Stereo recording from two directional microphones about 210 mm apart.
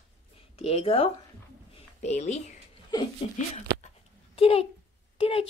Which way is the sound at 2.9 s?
20° left (ahead or behind).